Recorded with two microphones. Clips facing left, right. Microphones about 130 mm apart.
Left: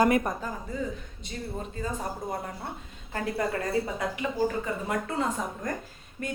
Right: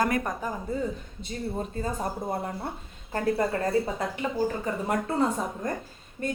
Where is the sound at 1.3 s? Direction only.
35° right (ahead or behind).